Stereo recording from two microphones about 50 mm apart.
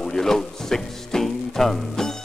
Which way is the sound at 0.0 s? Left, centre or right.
Centre.